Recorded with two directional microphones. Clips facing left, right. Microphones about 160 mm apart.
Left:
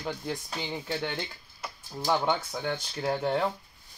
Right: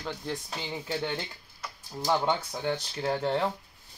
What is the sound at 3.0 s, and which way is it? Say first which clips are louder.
Speech: even; 5° left (ahead or behind).